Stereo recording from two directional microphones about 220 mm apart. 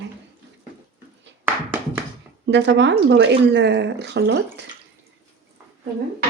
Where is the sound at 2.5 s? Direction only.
50° right (ahead or behind).